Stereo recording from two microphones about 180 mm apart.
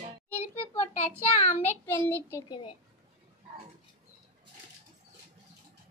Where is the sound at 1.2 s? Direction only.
10° left (ahead or behind).